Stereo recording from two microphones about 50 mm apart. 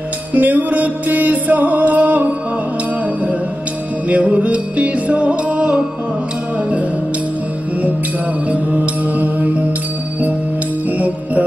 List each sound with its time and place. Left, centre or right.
0.3 s music: right
4.1 s music: right
9.0 s music: right
10.9 s music: right